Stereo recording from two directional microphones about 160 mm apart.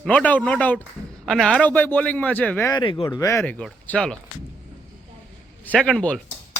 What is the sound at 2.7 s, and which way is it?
A man's voice, 30° left (ahead or behind).